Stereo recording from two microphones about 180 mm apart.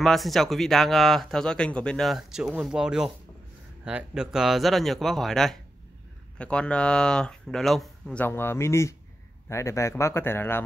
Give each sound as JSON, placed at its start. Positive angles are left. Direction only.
{"t": 0.0, "sound": "speech", "side_deg": 0}